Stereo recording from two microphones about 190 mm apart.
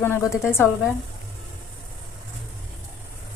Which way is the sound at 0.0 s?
15° left (ahead or behind).